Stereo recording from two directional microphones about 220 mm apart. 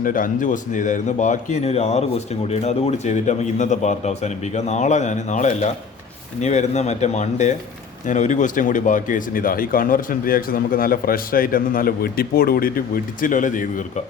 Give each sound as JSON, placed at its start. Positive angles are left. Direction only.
{"t": 0.0, "sound": "speech", "side_deg": 40}